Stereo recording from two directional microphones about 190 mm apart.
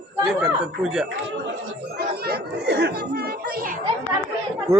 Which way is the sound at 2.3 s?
60° right (ahead or behind).